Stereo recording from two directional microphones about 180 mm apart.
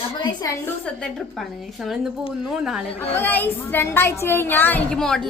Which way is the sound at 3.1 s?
10° left (ahead or behind).